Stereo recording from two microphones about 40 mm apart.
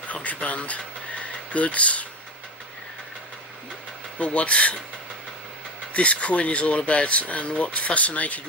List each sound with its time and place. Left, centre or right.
0.1 s speech: left
4.2 s speech: left
5.9 s speech: left